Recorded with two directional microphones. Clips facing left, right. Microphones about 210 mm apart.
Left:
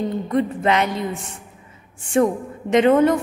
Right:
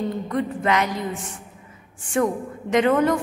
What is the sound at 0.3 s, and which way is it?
Speech, 25° left (ahead or behind).